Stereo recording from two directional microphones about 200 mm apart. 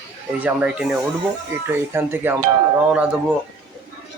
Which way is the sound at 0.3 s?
5° right (ahead or behind).